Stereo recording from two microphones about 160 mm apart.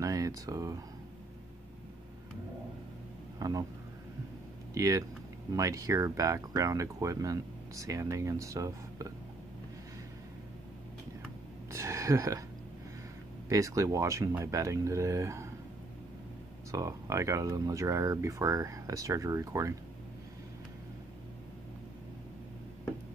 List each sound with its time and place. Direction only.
0.0 s speech: 20° right (ahead or behind)
3.3 s a man's voice: 20° right (ahead or behind)
4.7 s speech: 20° right (ahead or behind)
11.7 s speech: 20° right (ahead or behind)
13.5 s speech: 20° right (ahead or behind)
16.7 s speech: 20° right (ahead or behind)